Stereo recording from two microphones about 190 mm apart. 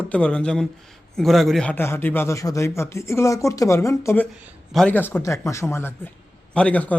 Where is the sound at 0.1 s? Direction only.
5° left (ahead or behind).